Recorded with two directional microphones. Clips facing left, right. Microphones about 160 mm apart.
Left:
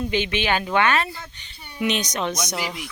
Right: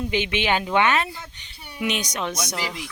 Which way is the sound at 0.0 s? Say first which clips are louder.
Left 1 dB; 15° right (ahead or behind).